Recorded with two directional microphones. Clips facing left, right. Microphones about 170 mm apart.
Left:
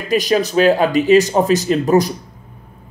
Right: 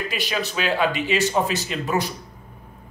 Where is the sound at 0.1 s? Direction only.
40° left (ahead or behind).